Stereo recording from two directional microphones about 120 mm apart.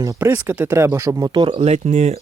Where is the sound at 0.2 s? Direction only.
15° right (ahead or behind); by 1.5 s 40° right (ahead or behind).